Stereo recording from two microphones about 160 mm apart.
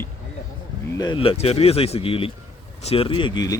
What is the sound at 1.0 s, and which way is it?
Speech, 30° left (ahead or behind).